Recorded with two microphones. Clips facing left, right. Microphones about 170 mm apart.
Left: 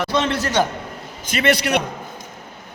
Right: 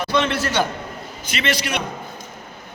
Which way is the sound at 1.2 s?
50° left (ahead or behind).